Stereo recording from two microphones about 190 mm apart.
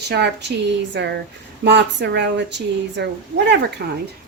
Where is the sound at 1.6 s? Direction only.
65° right (ahead or behind).